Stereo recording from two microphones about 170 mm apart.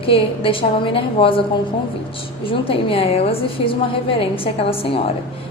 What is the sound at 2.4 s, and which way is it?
A woman's voice, 30° left (ahead or behind).